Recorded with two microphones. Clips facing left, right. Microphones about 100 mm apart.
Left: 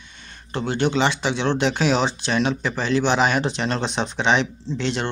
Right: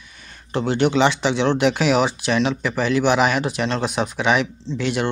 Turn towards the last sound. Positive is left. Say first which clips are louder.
# right 2 dB
turn(degrees=-15)  # may be behind; listen again after turning